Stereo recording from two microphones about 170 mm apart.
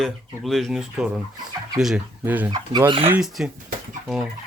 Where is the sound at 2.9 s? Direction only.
35° right (ahead or behind).